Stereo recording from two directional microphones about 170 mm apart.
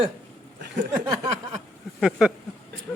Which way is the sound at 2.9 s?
15° left (ahead or behind).